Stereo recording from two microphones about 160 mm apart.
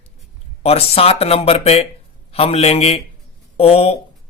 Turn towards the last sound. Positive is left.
turn(degrees=40)  # may be behind; listen again after turning